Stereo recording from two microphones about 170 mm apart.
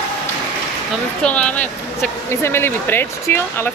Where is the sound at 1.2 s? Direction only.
5° left (ahead or behind).